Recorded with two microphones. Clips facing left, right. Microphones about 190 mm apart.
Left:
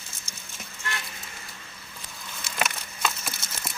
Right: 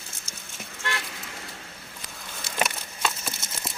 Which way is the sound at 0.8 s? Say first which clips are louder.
Right 3 dB; 90° right.